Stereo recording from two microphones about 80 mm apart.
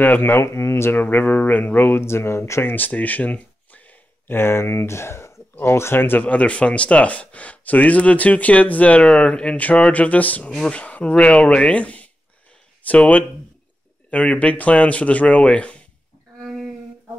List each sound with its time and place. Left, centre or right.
0.0 s speech: left
2.7 s a sound: left
4.4 s speech: left; by 15.8 s centre